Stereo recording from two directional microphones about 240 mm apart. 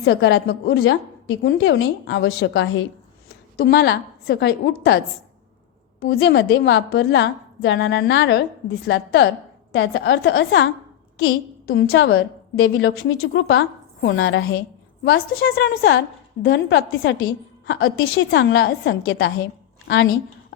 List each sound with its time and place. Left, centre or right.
0.0 s a woman's voice: left
6.0 s a woman's voice: left
11.2 s a woman's voice: left
12.1 s a woman's voice: left
18.3 s a woman's voice: left